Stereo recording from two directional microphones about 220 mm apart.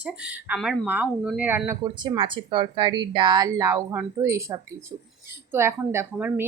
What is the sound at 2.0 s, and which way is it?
Speech, 20° right (ahead or behind).